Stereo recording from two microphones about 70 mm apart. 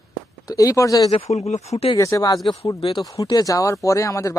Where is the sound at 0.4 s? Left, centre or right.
Left.